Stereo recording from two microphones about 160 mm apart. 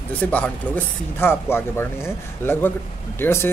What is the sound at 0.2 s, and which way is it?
Speech, 10° left (ahead or behind).